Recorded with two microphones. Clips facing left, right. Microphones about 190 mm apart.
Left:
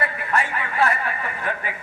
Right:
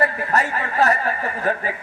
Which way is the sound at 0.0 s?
40° right (ahead or behind).